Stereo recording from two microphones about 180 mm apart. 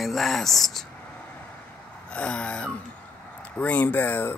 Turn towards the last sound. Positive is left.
turn(degrees=10)  # may be behind; listen again after turning